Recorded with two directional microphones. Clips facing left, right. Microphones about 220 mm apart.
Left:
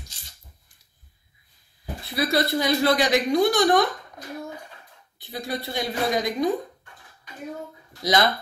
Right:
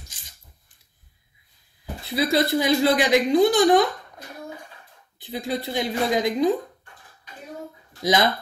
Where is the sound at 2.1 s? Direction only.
15° right (ahead or behind).